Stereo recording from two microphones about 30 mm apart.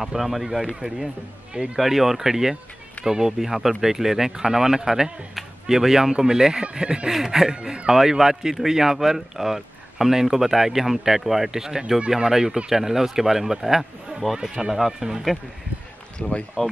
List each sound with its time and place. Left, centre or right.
0.0 s speech: centre
1.8 s speech: centre; by 7.1 s right
7.1 s speech: centre
16.2 s speech: left